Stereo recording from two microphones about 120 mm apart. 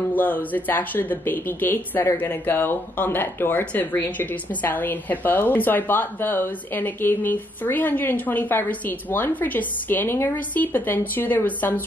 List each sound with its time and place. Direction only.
0.1 s speech: 15° left (ahead or behind)